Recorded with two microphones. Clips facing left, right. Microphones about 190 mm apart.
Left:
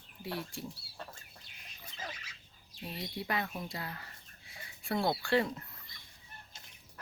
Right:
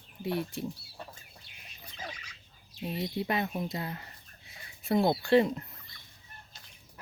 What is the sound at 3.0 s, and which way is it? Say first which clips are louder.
Speech: right 5 dB; 20° right (ahead or behind).